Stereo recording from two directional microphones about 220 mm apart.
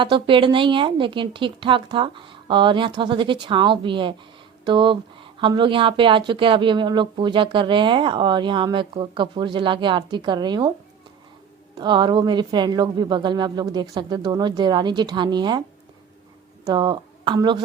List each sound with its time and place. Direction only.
0.0 s speech: 20° right (ahead or behind)
11.7 s speech: 20° right (ahead or behind)
16.6 s speech: 20° right (ahead or behind)